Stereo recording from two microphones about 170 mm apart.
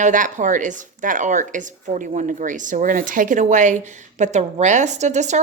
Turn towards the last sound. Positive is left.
turn(degrees=-45)  # may be behind; listen again after turning